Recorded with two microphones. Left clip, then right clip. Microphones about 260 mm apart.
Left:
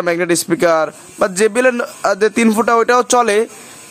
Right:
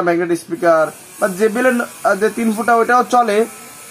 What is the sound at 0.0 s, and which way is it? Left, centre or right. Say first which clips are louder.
A man's voice: left 1 dB; left.